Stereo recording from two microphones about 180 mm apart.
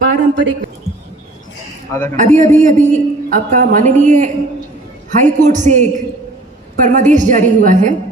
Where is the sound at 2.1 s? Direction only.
40° right (ahead or behind).